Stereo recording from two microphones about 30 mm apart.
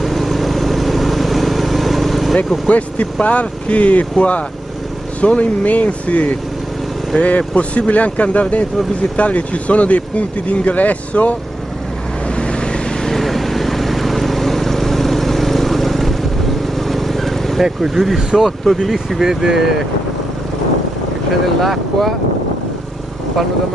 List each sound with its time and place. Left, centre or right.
0.0 s vehicle: centre
3.2 s speech: left
5.2 s speech: left
5.6 s speech: left
7.2 s speech: left
12.4 s vehicle: left
13.0 s vehicle: centre
17.7 s speech: centre
19.2 s speech: centre
21.5 s speech: centre